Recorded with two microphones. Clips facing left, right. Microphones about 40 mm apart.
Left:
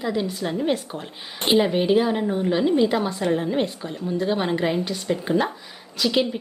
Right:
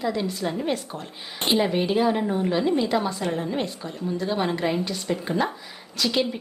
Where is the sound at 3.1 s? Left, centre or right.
Left.